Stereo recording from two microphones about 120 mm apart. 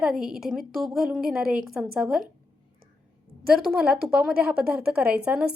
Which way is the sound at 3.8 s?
5° right (ahead or behind).